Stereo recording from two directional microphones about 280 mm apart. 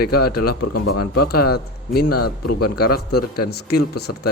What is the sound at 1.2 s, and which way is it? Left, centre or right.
Speech, left.